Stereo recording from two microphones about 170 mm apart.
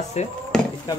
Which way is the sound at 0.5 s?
5° left (ahead or behind).